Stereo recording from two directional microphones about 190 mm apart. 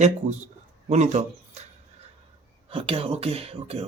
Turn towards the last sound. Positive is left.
turn(degrees=-30)  # may be behind; listen again after turning